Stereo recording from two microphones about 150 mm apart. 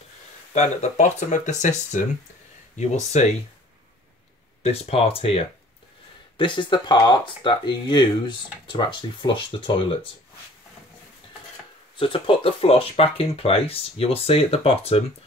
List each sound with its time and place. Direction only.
0.5 s speech: 50° left (ahead or behind)
4.6 s speech: 40° left (ahead or behind)
12.0 s speech: 35° left (ahead or behind)